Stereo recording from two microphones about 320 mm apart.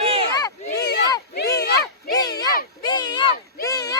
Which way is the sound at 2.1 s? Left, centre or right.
Centre.